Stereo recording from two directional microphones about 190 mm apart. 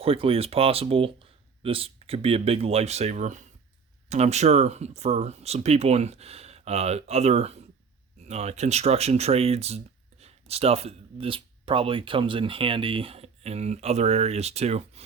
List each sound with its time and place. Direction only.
0.0 s speech: 30° right (ahead or behind)